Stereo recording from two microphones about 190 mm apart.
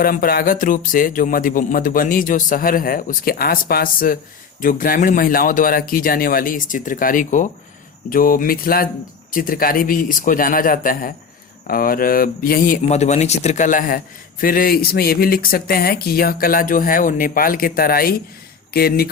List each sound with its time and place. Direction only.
0.0 s speech: 50° left (ahead or behind)